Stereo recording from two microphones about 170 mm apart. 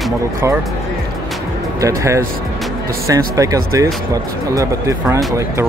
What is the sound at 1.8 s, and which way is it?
Speech, 20° right (ahead or behind).